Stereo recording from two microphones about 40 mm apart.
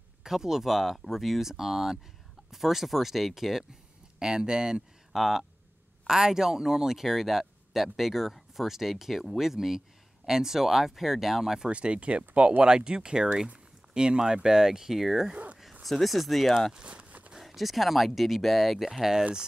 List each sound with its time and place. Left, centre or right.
0.2 s speech: centre
4.2 s speech: centre
5.1 s speech: centre
11.7 s speech: right; by 19.2 s centre